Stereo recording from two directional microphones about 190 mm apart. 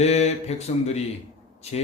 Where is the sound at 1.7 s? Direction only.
35° left (ahead or behind).